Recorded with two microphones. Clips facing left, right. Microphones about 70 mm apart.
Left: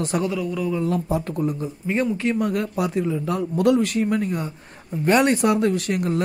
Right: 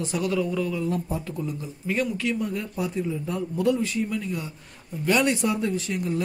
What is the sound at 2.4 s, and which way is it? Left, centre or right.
Speech, left.